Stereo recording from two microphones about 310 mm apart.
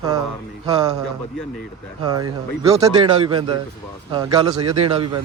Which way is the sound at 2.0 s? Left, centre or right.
Centre.